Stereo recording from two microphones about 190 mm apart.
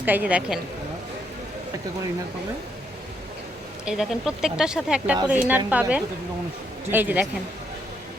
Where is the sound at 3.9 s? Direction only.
Centre (ahead or behind).